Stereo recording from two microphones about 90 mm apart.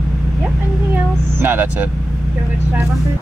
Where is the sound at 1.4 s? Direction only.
25° right (ahead or behind).